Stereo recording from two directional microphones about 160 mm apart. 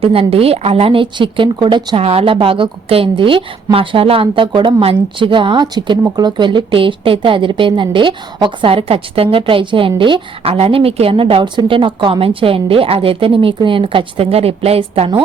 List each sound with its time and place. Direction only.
0.0 s a woman's voice: 35° right (ahead or behind)